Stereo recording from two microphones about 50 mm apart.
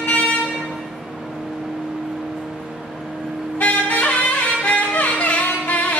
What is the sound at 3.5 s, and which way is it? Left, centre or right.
Music, left.